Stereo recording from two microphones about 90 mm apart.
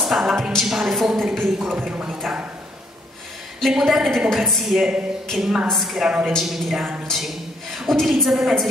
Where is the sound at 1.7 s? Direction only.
15° right (ahead or behind).